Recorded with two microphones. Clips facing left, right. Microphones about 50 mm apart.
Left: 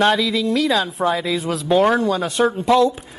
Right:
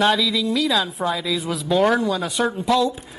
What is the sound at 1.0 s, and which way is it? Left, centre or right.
A woman's voice, left.